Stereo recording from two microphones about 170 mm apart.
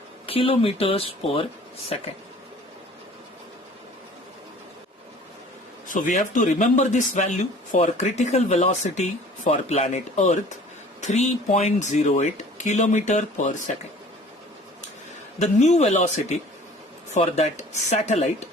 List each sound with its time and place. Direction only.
0.3 s speech: 35° left (ahead or behind)
5.9 s speech: 50° left (ahead or behind)
15.4 s speech: 45° left (ahead or behind)